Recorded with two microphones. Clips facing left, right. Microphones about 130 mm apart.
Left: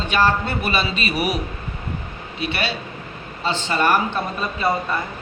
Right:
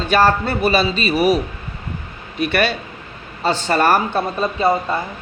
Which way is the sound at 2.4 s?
50° right (ahead or behind).